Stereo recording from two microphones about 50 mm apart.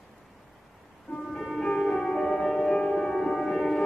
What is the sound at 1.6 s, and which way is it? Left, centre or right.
Music, centre.